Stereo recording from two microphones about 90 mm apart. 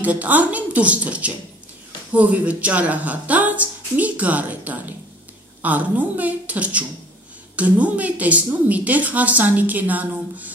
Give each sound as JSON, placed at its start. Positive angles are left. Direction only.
{"t": 0.0, "sound": "a woman's voice", "side_deg": -15}